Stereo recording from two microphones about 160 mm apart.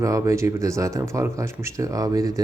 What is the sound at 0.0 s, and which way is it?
Speech, 20° right (ahead or behind).